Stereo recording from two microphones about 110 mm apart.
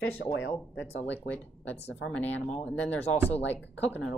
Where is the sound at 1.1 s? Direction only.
15° left (ahead or behind).